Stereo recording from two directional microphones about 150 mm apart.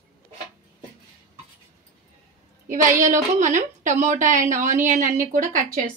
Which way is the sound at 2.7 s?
60° right (ahead or behind).